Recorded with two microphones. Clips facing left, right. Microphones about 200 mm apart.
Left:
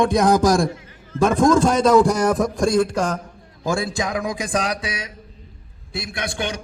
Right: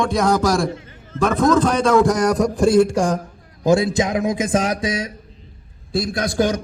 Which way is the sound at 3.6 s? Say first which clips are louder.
Right 7 dB; 20° right (ahead or behind).